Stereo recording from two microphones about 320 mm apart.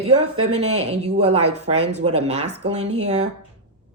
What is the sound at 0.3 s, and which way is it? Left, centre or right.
Speech, right.